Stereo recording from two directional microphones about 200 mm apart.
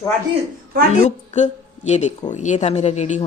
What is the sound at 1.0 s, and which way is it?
Speech, 35° left (ahead or behind).